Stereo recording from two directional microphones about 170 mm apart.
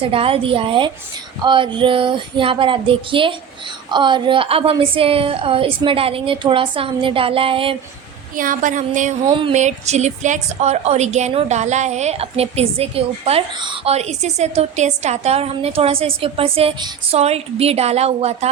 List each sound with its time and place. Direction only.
0.1 s a woman's voice: 35° right (ahead or behind)
8.4 s a sound: 50° right (ahead or behind)
9.3 s a woman's voice: 30° right (ahead or behind)
9.6 s a woman's voice: 40° right (ahead or behind)